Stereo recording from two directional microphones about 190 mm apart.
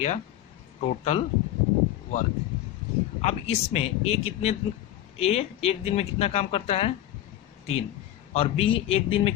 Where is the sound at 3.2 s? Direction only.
35° left (ahead or behind).